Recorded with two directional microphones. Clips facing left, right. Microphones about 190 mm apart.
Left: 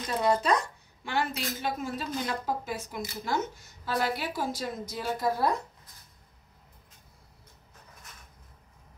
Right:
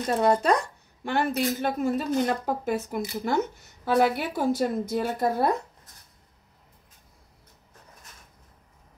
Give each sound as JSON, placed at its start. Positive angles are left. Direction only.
{"t": 0.0, "sound": "speech", "side_deg": -50}